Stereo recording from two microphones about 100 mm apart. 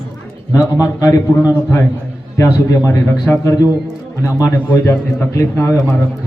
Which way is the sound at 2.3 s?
30° left (ahead or behind).